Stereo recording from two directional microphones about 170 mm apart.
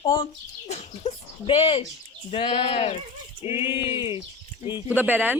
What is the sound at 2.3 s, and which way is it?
A woman's voice, 30° left (ahead or behind).